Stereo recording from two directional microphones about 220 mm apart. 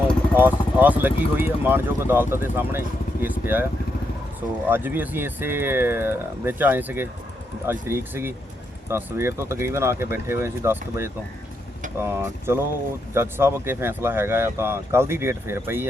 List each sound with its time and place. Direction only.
0.3 s speech: 10° right (ahead or behind)